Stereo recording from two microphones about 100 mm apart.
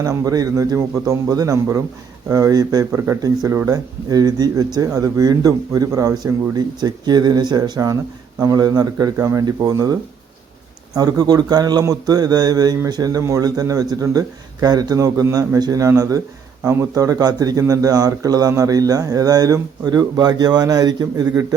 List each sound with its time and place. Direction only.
0.0 s speech: 35° right (ahead or behind)